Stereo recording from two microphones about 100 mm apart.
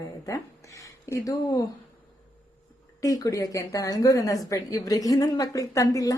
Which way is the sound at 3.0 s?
35° left (ahead or behind).